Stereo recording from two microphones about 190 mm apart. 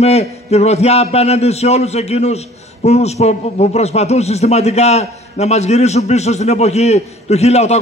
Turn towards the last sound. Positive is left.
turn(degrees=35)  # may be behind; listen again after turning